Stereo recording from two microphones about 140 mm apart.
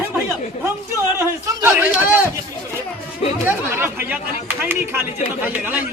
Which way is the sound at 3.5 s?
15° right (ahead or behind).